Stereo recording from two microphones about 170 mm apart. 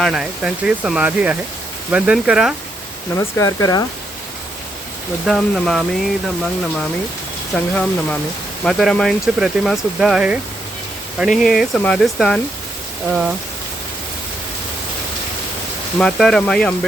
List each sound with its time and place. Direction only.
0.0 s speech: 5° right (ahead or behind)
3.2 s speech: 20° left (ahead or behind)
5.2 s speech: centre (ahead or behind)
7.5 s speech: 10° left (ahead or behind)
16.0 s speech: centre (ahead or behind)